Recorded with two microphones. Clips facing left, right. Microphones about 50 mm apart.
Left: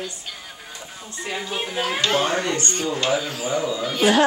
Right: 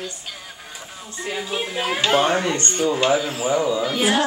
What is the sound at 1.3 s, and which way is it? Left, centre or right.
Speech, centre.